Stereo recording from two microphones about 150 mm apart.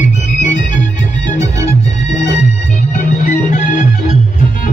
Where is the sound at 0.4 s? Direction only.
55° left (ahead or behind).